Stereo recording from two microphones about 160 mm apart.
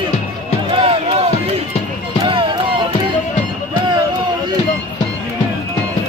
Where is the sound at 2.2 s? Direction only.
30° right (ahead or behind).